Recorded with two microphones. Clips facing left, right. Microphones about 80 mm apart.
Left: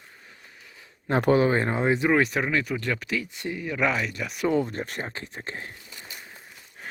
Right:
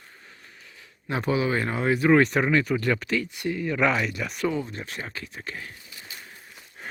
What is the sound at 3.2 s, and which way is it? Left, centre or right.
Speech, left.